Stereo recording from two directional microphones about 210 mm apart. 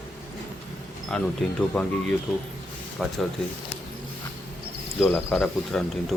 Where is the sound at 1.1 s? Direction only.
5° left (ahead or behind).